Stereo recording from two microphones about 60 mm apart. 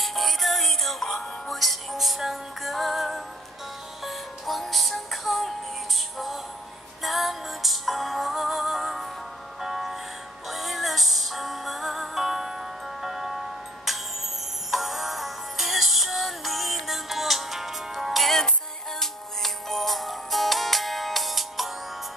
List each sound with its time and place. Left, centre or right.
0.0 s music: centre